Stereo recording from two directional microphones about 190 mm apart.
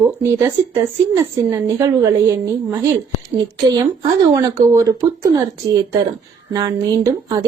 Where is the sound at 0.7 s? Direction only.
15° right (ahead or behind).